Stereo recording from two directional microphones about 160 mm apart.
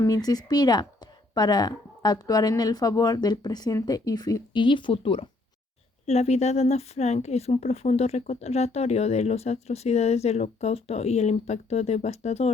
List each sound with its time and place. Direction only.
0.0 s a woman's voice: 25° left (ahead or behind); by 12.5 s 40° left (ahead or behind)